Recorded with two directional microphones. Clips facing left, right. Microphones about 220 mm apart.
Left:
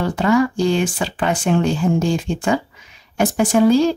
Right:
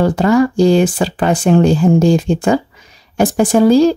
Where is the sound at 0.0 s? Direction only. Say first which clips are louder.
Right 5 dB; 40° right (ahead or behind).